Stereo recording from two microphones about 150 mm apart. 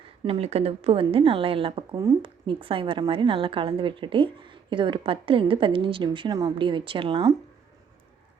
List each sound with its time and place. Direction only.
0.3 s speech: 40° right (ahead or behind)